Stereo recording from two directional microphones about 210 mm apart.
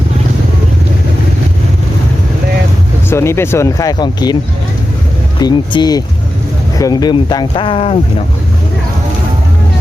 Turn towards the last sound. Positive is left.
turn(degrees=25)  # may be behind; listen again after turning